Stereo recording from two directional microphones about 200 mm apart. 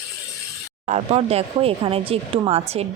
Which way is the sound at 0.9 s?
30° right (ahead or behind).